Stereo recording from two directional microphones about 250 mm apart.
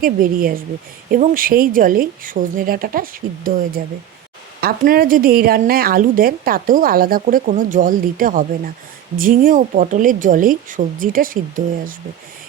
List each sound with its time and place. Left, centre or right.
0.0 s a woman's voice: right